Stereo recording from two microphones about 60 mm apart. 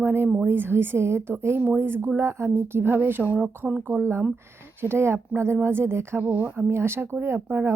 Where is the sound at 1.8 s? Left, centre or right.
Right.